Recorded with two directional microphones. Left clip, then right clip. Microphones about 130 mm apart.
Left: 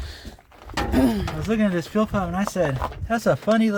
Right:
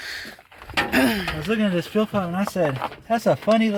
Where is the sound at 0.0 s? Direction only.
30° left (ahead or behind).